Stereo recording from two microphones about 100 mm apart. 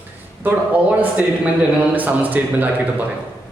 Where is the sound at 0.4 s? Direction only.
15° right (ahead or behind).